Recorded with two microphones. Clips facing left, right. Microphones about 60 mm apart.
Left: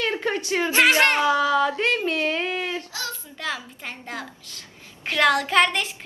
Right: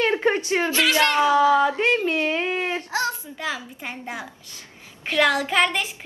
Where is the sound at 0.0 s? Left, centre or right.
Right.